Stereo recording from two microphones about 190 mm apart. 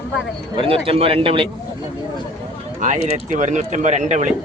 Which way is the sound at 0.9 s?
30° right (ahead or behind).